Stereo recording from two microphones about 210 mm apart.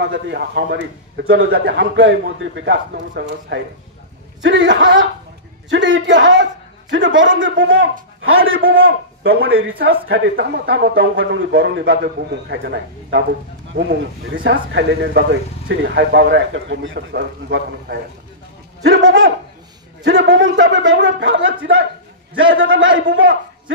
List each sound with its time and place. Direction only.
0.0 s a man's voice: 55° right (ahead or behind)
9.3 s a man's voice: 45° right (ahead or behind)
10.0 s a man's voice: 60° right (ahead or behind)